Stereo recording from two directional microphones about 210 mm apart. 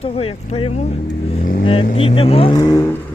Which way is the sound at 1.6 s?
25° left (ahead or behind).